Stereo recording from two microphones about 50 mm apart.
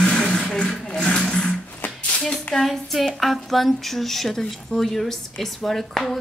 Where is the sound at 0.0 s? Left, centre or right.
Centre.